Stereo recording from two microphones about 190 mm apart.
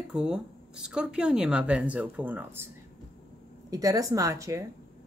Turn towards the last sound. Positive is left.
turn(degrees=-15)  # may be behind; listen again after turning